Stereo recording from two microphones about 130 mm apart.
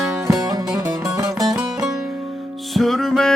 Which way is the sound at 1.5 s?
5° right (ahead or behind).